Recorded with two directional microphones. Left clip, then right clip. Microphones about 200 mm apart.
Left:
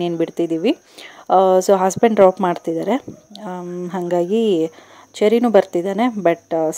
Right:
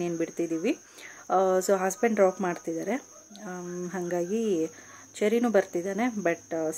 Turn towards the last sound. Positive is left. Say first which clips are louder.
# left 11 dB
turn(degrees=30)  # may be behind; listen again after turning